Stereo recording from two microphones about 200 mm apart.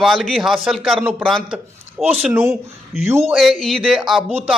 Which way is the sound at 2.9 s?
Centre (ahead or behind).